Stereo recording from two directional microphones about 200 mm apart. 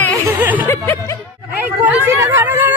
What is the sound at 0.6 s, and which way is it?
Music, 10° left (ahead or behind).